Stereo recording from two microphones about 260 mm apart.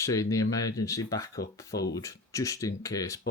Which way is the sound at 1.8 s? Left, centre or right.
Left.